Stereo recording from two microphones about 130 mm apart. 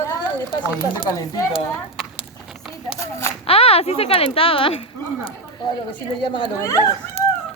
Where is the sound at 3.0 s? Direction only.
20° left (ahead or behind).